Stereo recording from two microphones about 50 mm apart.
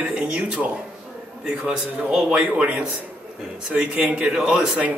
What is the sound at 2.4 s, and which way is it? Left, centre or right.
A man's voice, right.